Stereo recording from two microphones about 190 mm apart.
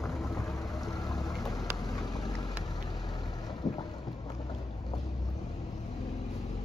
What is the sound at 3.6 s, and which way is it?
Boat, 20° left (ahead or behind).